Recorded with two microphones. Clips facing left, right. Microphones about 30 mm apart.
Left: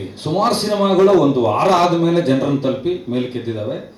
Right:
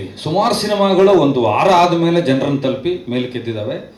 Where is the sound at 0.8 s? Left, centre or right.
Right.